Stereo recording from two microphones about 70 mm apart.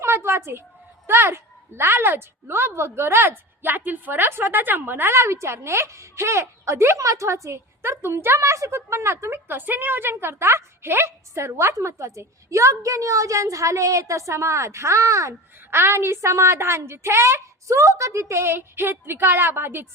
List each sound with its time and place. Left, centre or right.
0.0 s a sound: right
1.0 s a woman's voice: right
5.2 s a woman's voice: right